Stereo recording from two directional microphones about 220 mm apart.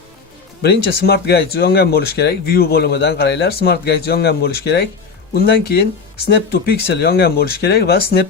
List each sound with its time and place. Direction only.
0.6 s speech: 45° left (ahead or behind)